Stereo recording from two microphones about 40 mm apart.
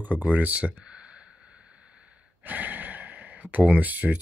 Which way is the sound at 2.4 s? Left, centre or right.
Right.